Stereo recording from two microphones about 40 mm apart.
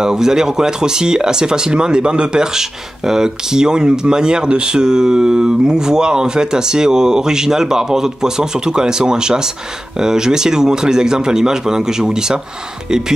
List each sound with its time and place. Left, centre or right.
0.0 s speech: centre